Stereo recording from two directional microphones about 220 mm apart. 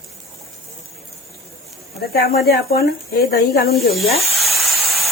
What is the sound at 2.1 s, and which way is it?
Speech, 45° left (ahead or behind).